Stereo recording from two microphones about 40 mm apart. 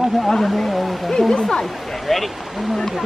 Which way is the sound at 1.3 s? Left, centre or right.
Centre.